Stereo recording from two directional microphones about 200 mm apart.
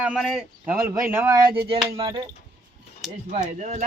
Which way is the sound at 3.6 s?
35° right (ahead or behind).